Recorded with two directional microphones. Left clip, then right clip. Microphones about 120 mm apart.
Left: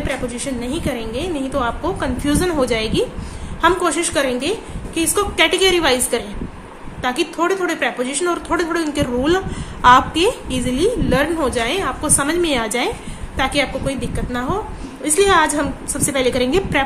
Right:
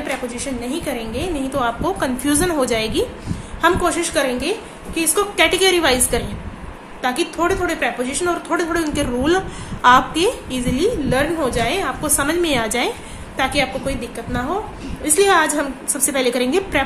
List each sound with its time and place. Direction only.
0.3 s a woman's voice: 20° left (ahead or behind)
1.5 s a woman's voice: centre (ahead or behind)
3.6 s a woman's voice: 15° left (ahead or behind)